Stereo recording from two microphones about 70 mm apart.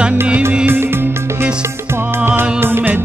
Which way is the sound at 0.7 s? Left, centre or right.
Right.